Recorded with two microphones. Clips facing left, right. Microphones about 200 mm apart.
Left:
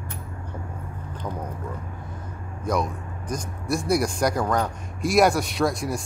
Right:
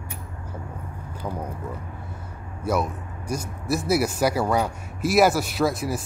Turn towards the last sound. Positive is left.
turn(degrees=-5)  # may be behind; listen again after turning